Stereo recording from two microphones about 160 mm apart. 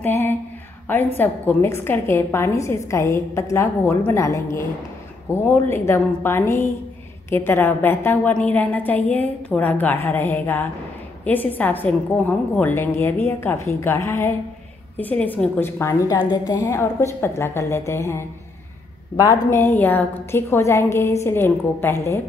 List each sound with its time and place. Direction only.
0.0 s a woman's voice: 15° left (ahead or behind)